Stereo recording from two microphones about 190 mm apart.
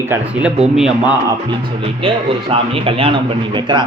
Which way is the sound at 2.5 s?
30° right (ahead or behind).